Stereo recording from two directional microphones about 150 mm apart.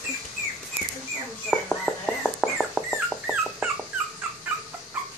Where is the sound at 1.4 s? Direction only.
Centre (ahead or behind).